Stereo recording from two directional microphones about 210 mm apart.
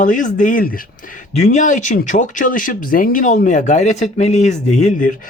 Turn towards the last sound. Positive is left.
turn(degrees=35)  # may be behind; listen again after turning